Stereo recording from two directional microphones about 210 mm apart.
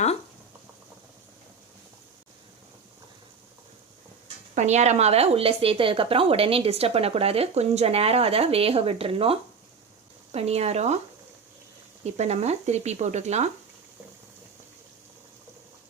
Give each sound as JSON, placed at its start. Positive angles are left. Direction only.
{"t": 4.5, "sound": "speech", "side_deg": -35}
{"t": 12.0, "sound": "speech", "side_deg": -30}